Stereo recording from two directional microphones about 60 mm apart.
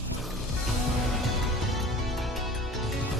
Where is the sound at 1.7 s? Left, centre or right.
Centre.